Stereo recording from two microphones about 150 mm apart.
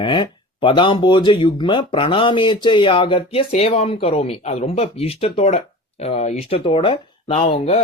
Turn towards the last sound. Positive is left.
turn(degrees=40)  # may be behind; listen again after turning